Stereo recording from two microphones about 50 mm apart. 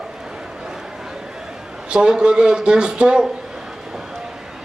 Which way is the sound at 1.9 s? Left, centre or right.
Centre.